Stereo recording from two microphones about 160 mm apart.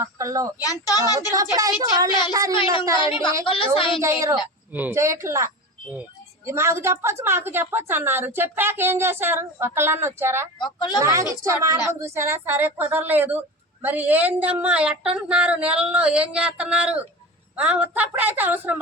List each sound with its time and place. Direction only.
0.0 s a woman's voice: 20° right (ahead or behind)
0.6 s speech: 20° left (ahead or behind)
1.3 s a woman's voice: 20° right (ahead or behind)
3.1 s a woman's voice: 35° left (ahead or behind)
4.0 s speech: 20° right (ahead or behind)
10.6 s speech: 30° left (ahead or behind)
11.0 s a woman's voice: 20° right (ahead or behind)